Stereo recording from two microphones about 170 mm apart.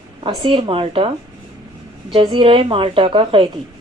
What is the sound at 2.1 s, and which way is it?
A woman's voice, 30° right (ahead or behind).